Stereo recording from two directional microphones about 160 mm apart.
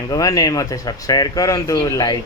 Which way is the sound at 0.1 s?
25° left (ahead or behind).